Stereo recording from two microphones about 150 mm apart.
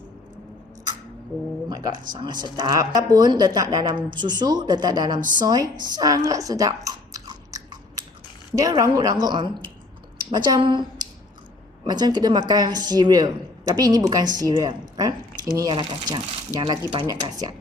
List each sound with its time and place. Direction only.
1.7 s speech: 30° right (ahead or behind)
5.9 s chewing: 25° right (ahead or behind)
8.5 s speech: 25° right (ahead or behind)